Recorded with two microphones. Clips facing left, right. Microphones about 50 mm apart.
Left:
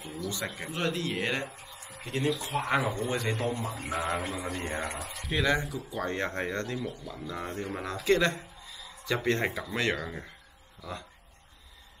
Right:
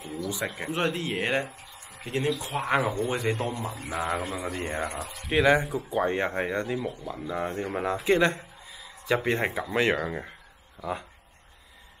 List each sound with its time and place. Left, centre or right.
0.3 s speech: centre
2.4 s speech: centre
6.0 s speech: centre